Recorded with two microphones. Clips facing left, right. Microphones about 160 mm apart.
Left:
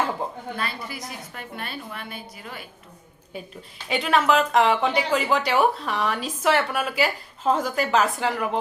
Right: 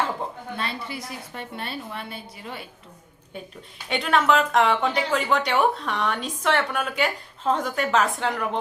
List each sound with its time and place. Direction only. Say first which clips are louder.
0.5 s a woman's voice: even; 25° right (ahead or behind)
3.3 s speech: left 1 dB; 5° left (ahead or behind)